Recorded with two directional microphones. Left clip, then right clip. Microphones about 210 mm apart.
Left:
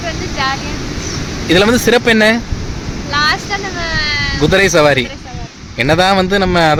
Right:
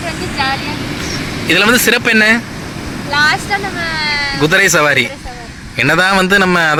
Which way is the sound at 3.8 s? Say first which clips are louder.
Left 1 dB; 35° left (ahead or behind).